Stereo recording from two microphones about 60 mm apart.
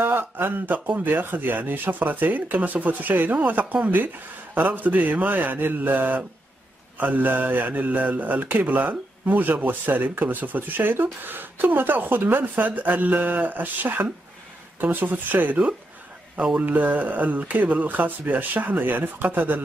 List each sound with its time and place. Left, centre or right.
0.0 s a man's voice: right